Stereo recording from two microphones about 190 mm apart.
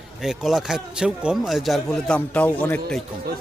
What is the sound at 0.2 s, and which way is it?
A man's voice, centre (ahead or behind).